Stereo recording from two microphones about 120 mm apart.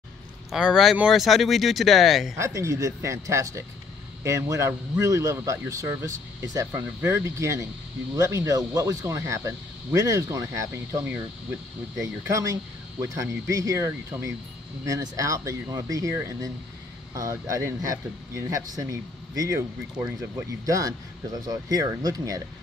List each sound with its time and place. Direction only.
0.5 s speech: 5° right (ahead or behind)
2.3 s speech: 25° right (ahead or behind)
12.3 s speech: 25° right (ahead or behind)